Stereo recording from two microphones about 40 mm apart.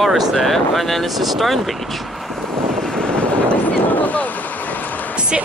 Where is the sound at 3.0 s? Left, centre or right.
Left.